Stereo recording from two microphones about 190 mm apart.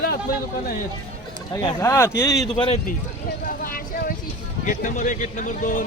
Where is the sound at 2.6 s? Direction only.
30° left (ahead or behind).